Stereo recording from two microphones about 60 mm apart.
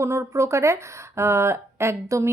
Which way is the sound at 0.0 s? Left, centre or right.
Right.